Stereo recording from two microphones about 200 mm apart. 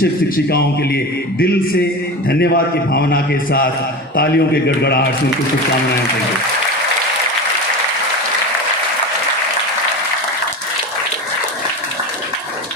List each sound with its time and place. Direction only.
2.9 s a man's voice: 50° left (ahead or behind)